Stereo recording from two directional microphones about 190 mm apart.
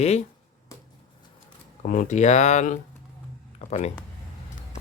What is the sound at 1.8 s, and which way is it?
Speech, 40° left (ahead or behind).